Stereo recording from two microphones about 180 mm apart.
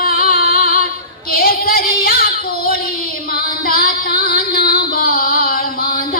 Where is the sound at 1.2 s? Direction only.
55° left (ahead or behind).